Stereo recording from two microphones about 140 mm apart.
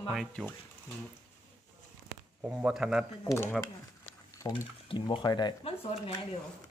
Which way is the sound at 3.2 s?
20° left (ahead or behind).